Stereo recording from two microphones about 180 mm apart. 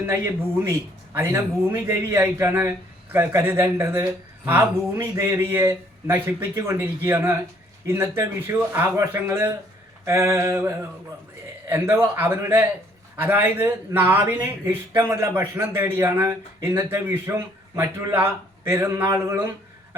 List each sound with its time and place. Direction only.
1.1 s a man's voice: 15° right (ahead or behind)